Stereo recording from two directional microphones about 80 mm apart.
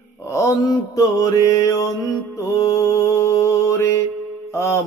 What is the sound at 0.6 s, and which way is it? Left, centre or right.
Mantra, left.